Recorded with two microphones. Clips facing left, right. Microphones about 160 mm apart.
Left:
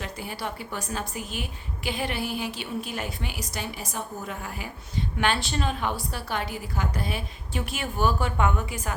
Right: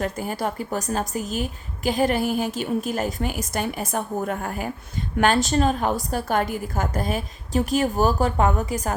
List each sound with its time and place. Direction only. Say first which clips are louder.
0.0 s a woman's voice: right 8 dB; 45° right (ahead or behind)